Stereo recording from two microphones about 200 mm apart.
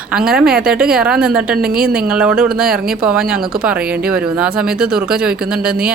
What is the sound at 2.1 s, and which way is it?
A woman's voice, 5° right (ahead or behind).